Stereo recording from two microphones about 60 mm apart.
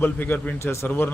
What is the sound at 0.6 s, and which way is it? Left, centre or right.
Speech, left.